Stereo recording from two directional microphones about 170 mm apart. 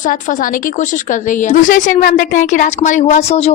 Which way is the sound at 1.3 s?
50° left (ahead or behind).